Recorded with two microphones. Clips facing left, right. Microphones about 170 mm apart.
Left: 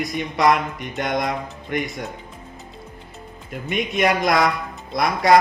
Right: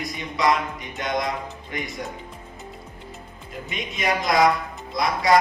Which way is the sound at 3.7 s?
60° left (ahead or behind).